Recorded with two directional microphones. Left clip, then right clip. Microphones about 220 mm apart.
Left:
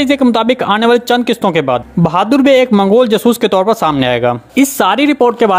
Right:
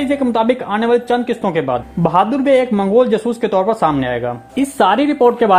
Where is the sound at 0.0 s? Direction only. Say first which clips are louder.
Left 4 dB; 25° left (ahead or behind).